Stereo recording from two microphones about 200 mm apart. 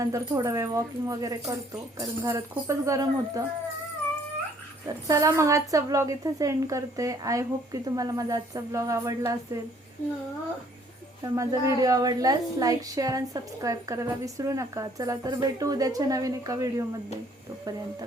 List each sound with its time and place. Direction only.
0.0 s a woman's voice: 15° right (ahead or behind)
5.0 s a woman's voice: 15° right (ahead or behind)
11.2 s a woman's voice: 15° right (ahead or behind)